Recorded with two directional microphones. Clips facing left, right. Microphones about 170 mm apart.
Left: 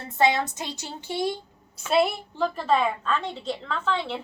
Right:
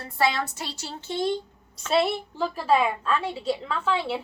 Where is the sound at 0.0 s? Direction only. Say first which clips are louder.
Left 3 dB; 20° left (ahead or behind).